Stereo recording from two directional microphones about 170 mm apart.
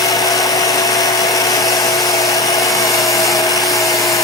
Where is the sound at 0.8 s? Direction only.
20° left (ahead or behind).